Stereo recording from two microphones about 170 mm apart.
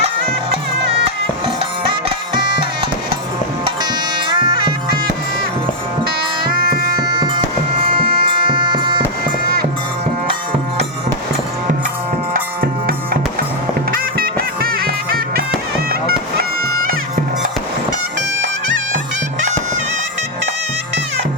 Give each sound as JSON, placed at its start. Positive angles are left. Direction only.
{"t": 0.3, "sound": "music", "side_deg": -80}
{"t": 4.3, "sound": "music", "side_deg": -30}
{"t": 6.6, "sound": "music", "side_deg": -60}
{"t": 7.0, "sound": "music", "side_deg": -25}
{"t": 14.2, "sound": "music", "side_deg": -60}